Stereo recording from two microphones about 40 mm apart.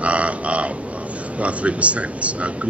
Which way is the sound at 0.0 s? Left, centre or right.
Right.